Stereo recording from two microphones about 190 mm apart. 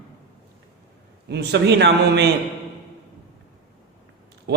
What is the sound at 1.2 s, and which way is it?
A man's voice, 60° right (ahead or behind).